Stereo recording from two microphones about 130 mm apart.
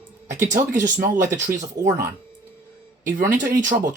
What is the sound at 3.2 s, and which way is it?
Speech, 85° right.